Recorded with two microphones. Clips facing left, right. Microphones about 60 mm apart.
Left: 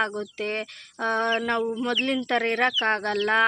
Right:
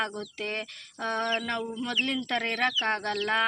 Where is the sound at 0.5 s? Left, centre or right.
Left.